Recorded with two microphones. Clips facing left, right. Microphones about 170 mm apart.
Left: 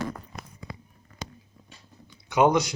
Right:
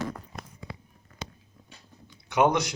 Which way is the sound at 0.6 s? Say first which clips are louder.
Left 1 dB; 40° left (ahead or behind).